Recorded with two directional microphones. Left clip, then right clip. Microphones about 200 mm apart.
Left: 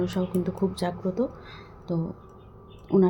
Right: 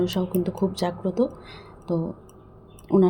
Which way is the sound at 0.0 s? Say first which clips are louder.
Right 3 dB; 20° right (ahead or behind).